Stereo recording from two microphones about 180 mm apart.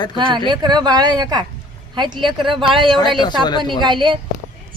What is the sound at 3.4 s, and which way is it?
Speech, 25° left (ahead or behind).